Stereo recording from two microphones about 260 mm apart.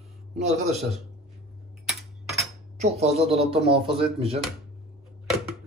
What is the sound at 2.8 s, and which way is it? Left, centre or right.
A man's voice, right.